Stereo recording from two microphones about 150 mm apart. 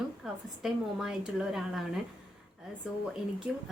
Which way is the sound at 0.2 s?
5° right (ahead or behind).